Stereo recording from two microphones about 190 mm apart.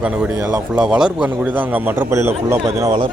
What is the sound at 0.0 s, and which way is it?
Speech, 5° right (ahead or behind).